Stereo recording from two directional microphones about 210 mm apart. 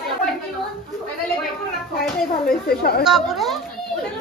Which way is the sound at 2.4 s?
45° left (ahead or behind).